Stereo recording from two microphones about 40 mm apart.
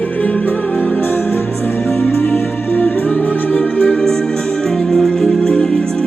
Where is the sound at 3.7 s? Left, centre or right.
Left.